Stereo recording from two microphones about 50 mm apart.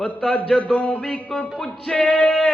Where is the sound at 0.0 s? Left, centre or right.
Centre.